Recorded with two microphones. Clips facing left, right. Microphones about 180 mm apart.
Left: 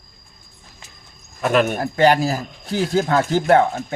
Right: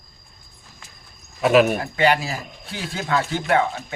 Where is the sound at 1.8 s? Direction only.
40° left (ahead or behind).